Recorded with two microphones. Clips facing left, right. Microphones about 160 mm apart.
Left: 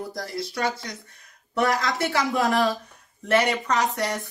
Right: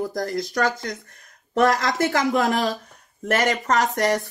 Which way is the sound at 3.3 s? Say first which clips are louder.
Right 1 dB; 45° right (ahead or behind).